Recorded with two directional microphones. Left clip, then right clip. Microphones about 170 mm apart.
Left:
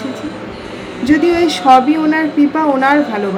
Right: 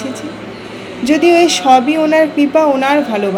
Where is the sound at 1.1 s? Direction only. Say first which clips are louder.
Right 3 dB; 25° right (ahead or behind).